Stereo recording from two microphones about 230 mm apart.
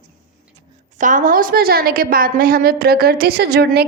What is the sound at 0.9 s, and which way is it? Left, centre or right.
A woman's voice, right.